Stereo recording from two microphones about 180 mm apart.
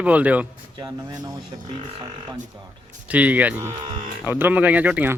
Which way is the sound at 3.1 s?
10° right (ahead or behind).